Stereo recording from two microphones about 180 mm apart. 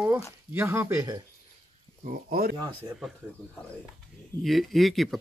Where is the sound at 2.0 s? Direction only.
50° right (ahead or behind).